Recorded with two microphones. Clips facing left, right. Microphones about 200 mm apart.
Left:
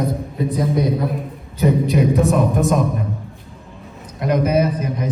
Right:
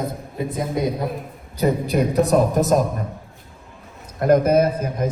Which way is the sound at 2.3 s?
40° right (ahead or behind).